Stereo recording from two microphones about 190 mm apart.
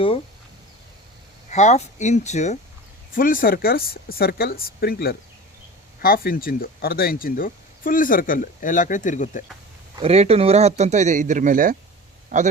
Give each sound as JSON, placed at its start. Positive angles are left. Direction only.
{"t": 1.5, "sound": "speech", "side_deg": 40}
{"t": 10.0, "sound": "speech", "side_deg": -30}